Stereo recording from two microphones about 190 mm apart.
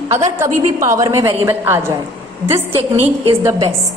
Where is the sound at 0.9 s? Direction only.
15° right (ahead or behind).